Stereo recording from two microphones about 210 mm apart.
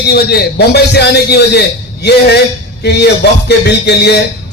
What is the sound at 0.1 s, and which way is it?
A man's voice, 50° left (ahead or behind).